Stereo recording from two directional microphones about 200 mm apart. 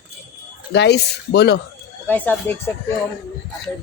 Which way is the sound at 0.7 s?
55° left (ahead or behind).